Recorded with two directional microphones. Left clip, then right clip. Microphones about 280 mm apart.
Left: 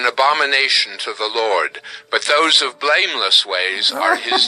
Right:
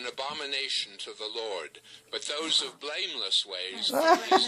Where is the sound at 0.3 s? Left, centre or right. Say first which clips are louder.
Left 17 dB; left.